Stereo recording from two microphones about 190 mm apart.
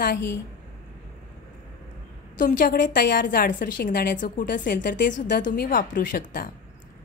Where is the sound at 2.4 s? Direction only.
45° left (ahead or behind).